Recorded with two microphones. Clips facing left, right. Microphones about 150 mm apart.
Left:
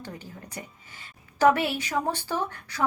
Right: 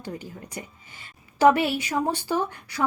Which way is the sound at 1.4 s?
15° right (ahead or behind).